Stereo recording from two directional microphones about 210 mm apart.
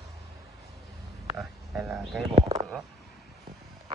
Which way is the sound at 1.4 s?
Centre (ahead or behind).